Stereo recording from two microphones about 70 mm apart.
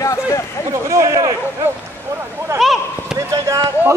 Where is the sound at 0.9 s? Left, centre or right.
Right.